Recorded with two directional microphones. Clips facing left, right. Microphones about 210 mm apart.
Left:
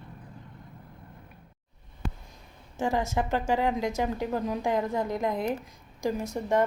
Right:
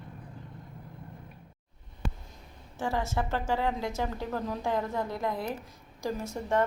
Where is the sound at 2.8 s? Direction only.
15° left (ahead or behind).